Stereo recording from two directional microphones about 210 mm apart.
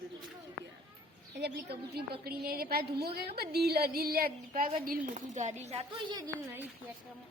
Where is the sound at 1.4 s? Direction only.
50° right (ahead or behind); by 6.6 s 15° right (ahead or behind).